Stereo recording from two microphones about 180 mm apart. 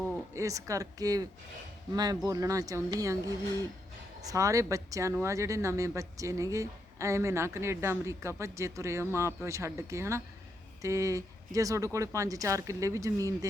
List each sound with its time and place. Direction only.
0.3 s speech: 15° right (ahead or behind)
4.2 s speech: 20° right (ahead or behind)